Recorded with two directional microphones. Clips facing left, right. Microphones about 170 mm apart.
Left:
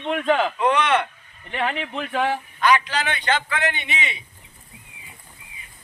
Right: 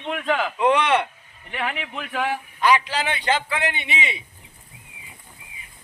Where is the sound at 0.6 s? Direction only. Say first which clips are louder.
Right 1 dB; 15° right (ahead or behind).